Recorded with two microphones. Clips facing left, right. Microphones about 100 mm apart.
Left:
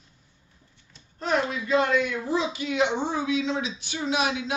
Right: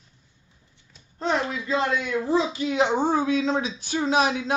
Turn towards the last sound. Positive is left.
turn(degrees=-40)  # may be behind; listen again after turning